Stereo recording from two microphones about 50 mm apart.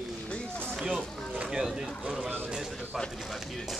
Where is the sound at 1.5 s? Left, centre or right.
Centre.